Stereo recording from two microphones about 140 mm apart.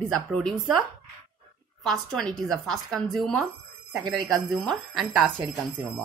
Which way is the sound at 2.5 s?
Centre (ahead or behind).